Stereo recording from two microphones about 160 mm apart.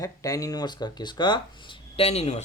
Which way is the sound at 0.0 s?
20° left (ahead or behind).